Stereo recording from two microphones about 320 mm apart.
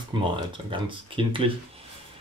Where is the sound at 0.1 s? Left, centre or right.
Centre.